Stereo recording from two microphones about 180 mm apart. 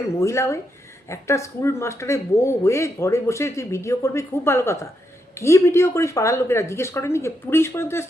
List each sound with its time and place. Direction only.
0.2 s speech: 15° left (ahead or behind)